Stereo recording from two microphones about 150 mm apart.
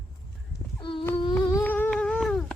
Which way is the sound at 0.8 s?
35° left (ahead or behind).